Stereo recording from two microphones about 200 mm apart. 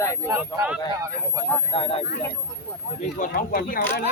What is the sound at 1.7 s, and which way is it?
Speech, 30° left (ahead or behind).